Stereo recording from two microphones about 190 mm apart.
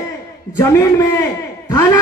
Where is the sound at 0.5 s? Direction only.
15° left (ahead or behind).